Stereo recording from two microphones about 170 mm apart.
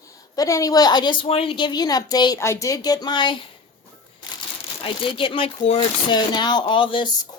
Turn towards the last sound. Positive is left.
turn(degrees=30)  # may be behind; listen again after turning